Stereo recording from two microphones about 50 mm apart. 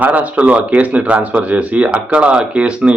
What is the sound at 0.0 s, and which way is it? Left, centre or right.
Speech, right.